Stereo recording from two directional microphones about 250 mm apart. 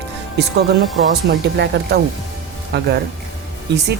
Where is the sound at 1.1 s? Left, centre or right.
Right.